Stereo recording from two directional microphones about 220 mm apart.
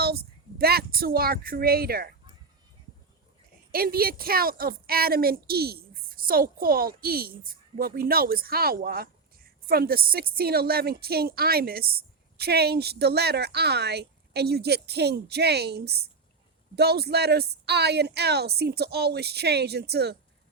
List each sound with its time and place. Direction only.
0.0 s speech: 45° right (ahead or behind)
3.7 s a woman's voice: 45° right (ahead or behind)